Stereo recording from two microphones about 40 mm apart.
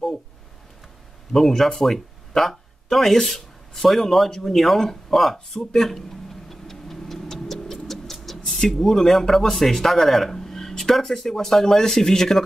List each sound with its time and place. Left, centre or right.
1.3 s speech: centre
6.5 s clock: centre
8.5 s speech: centre